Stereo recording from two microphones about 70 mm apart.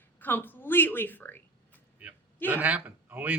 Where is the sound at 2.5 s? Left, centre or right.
Right.